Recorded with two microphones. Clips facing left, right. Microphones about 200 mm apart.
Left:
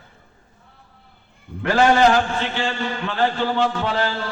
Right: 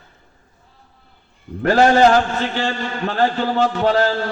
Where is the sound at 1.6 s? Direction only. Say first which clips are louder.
Right 3 dB; 40° right (ahead or behind).